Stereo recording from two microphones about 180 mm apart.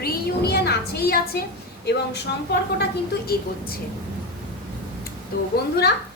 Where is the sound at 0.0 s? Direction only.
60° left (ahead or behind).